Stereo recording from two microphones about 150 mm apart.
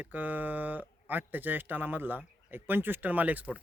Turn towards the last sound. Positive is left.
turn(degrees=-10)  # may be behind; listen again after turning